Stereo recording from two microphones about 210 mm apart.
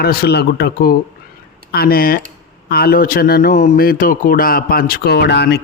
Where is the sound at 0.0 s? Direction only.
45° left (ahead or behind).